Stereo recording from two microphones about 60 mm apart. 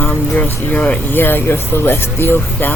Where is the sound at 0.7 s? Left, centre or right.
Left.